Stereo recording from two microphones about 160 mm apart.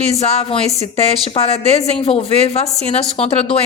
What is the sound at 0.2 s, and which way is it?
A woman's voice, 40° left (ahead or behind).